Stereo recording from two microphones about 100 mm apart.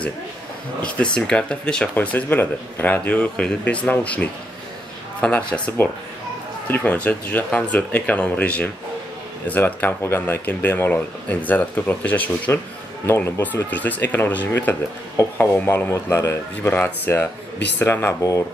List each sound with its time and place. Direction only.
0.9 s speech: 10° left (ahead or behind)